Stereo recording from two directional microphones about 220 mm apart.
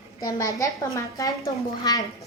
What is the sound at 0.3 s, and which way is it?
A child's voice, 15° left (ahead or behind).